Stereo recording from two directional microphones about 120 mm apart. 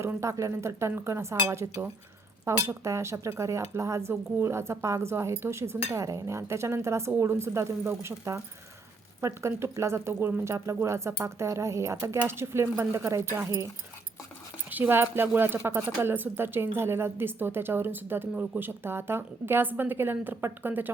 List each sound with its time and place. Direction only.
0.0 s speech: 25° right (ahead or behind)
14.7 s speech: 15° right (ahead or behind)